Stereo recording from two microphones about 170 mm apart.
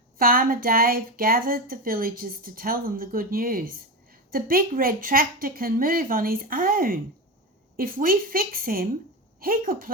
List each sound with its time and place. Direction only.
0.2 s a woman's voice: 60° right (ahead or behind)